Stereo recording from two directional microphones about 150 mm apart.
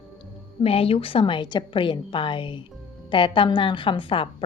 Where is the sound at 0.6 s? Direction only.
40° left (ahead or behind).